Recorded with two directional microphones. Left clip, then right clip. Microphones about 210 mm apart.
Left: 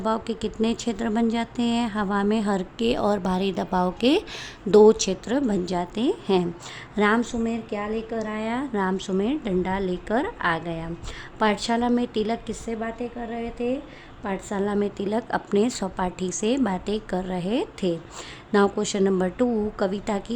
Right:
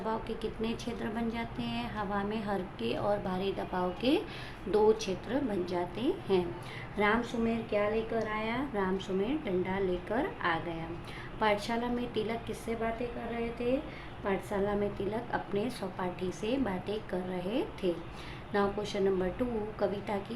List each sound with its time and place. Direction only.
0.0 s speech: 50° left (ahead or behind)
14.3 s speech: 45° left (ahead or behind)